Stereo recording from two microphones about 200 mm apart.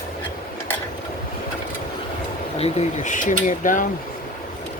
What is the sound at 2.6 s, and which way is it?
Speech, 35° left (ahead or behind).